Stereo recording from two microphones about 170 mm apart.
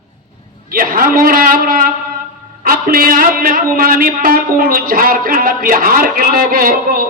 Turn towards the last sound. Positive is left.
turn(degrees=-55)  # may be behind; listen again after turning